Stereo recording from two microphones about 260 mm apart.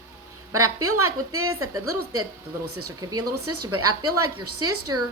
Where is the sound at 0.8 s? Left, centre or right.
Right.